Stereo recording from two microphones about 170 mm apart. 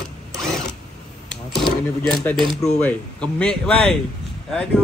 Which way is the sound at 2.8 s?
5° left (ahead or behind).